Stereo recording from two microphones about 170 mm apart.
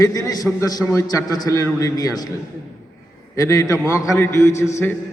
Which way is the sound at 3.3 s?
20° left (ahead or behind).